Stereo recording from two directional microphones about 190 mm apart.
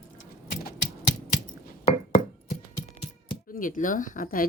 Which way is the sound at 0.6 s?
65° left (ahead or behind).